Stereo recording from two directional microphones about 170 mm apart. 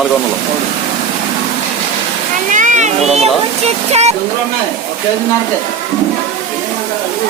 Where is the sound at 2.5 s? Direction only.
45° right (ahead or behind).